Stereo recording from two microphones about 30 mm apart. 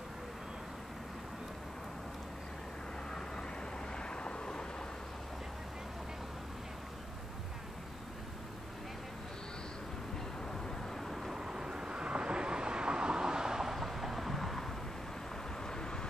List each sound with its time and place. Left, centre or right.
3.1 s vehicle: left
11.0 s vehicle: centre
11.3 s vehicle: centre
13.7 s vehicle: centre
15.6 s vehicle: left